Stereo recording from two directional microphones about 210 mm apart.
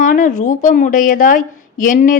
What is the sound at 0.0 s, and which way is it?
A woman's voice, 40° left (ahead or behind).